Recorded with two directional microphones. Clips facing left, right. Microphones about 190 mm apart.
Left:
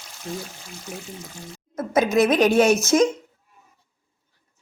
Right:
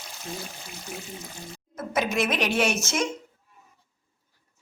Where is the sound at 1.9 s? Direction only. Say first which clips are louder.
Left 8 dB; 40° left (ahead or behind).